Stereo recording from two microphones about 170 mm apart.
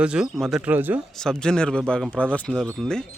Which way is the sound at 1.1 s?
5° left (ahead or behind).